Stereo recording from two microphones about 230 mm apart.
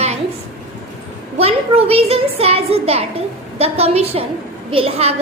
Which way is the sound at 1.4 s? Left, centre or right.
Right.